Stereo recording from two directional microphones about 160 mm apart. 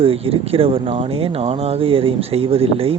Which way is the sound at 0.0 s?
35° right (ahead or behind).